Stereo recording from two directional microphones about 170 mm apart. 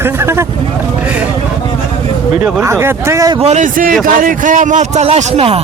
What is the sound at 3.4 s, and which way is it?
A man's voice, 40° right (ahead or behind).